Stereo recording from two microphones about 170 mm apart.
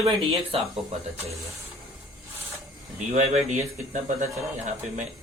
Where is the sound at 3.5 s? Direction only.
45° right (ahead or behind).